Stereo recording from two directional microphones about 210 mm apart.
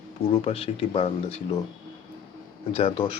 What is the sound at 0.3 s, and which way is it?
Speech, 30° left (ahead or behind).